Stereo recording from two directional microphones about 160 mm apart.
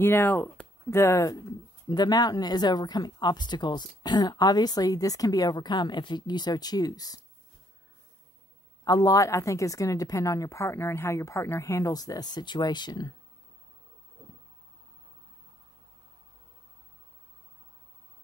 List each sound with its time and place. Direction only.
0.0 s speech: 15° left (ahead or behind)
8.8 s speech: 20° left (ahead or behind)